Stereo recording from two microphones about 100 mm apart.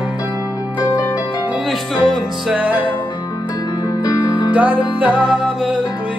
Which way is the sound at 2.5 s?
15° right (ahead or behind).